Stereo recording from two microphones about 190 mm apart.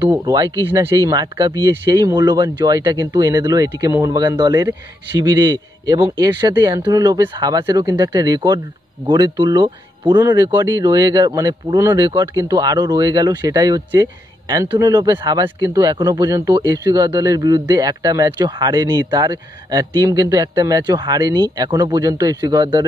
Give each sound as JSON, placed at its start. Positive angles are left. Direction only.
{"t": 0.1, "sound": "speech", "side_deg": -20}